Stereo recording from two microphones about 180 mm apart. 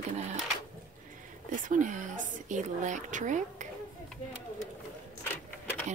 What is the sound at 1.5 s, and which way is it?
A woman's voice, 45° right (ahead or behind).